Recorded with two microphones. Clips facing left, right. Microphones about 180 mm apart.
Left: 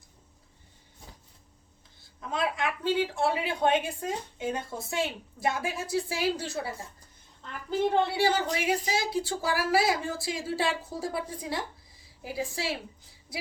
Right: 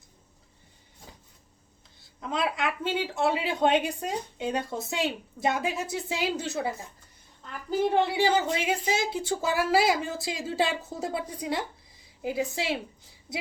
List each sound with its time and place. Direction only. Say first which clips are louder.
2.2 s a woman's voice: right 1 dB; 20° right (ahead or behind)
7.7 s a woman's voice: right 1 dB; 10° right (ahead or behind)